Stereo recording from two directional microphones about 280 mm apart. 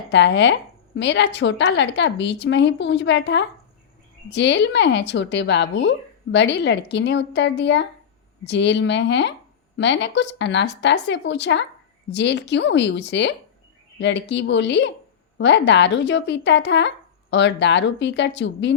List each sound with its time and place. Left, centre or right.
0.1 s speech: left